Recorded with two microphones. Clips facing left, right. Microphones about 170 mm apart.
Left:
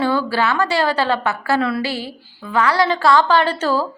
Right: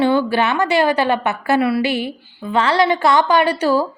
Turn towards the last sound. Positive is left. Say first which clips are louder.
# right 2 dB
turn(degrees=-15)  # may be behind; listen again after turning